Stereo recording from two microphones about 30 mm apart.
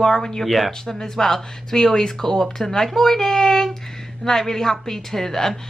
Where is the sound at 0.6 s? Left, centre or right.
Centre.